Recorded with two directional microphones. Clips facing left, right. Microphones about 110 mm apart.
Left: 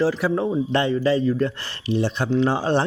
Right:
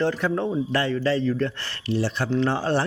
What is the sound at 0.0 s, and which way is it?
Speech, 5° left (ahead or behind).